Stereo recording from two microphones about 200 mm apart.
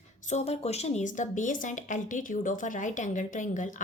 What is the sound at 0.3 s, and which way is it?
A woman's voice, 35° left (ahead or behind).